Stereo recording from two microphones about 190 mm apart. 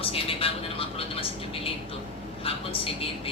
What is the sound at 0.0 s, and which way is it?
Vehicle, 30° left (ahead or behind).